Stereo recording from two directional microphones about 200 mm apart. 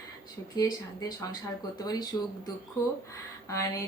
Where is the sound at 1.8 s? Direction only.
20° left (ahead or behind).